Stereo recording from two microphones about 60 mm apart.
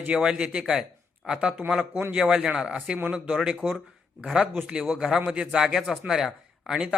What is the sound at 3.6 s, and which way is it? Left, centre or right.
Speech, right.